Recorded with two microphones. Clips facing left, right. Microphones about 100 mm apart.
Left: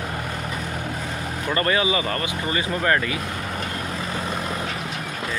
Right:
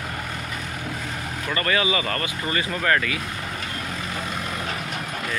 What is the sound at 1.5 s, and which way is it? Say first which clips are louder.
Speech: left 2 dB; 25° left (ahead or behind).